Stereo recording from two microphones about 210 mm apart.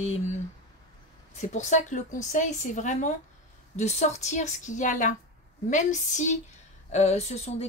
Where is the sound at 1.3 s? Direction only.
35° left (ahead or behind).